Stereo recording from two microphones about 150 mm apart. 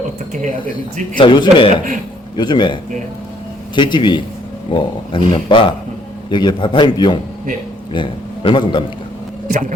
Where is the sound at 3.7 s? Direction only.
30° left (ahead or behind).